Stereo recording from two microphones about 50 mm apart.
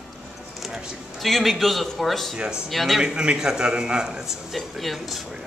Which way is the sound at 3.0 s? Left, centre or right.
Centre.